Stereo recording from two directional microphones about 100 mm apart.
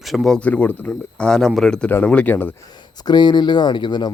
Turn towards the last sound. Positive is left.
turn(degrees=50)  # may be behind; listen again after turning